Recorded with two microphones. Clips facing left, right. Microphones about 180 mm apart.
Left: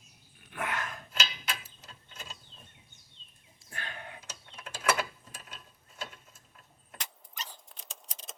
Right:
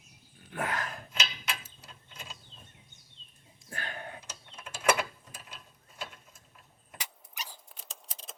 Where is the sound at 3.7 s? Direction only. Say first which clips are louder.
Right 3 dB; 40° right (ahead or behind).